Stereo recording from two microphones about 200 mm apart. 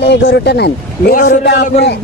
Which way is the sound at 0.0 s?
60° left (ahead or behind).